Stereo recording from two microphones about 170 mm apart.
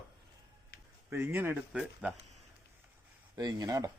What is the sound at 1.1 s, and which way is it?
Speech, 15° right (ahead or behind).